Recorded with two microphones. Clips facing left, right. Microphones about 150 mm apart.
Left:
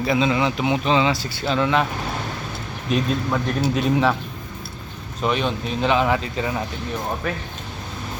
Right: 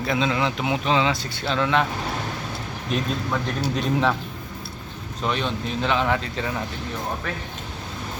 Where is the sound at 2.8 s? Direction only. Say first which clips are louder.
Left 4 dB; 5° left (ahead or behind).